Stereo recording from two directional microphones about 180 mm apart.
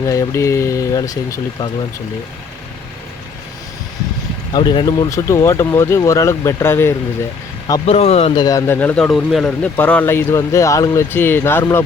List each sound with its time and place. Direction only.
0.0 s speech: 15° left (ahead or behind)
4.5 s speech: 25° left (ahead or behind)
7.9 s speech: 35° left (ahead or behind)
8.4 s speech: 15° left (ahead or behind)